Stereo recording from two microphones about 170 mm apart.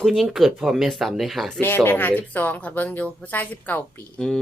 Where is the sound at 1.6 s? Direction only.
10° left (ahead or behind).